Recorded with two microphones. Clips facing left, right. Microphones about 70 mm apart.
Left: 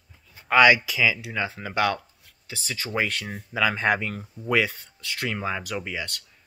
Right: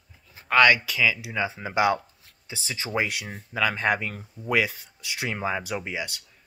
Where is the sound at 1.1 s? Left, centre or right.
Centre.